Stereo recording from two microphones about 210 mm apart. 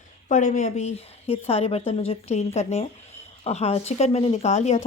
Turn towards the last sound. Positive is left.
turn(degrees=30)  # may be behind; listen again after turning